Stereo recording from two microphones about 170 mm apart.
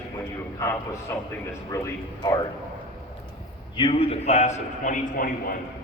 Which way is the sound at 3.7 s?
30° left (ahead or behind).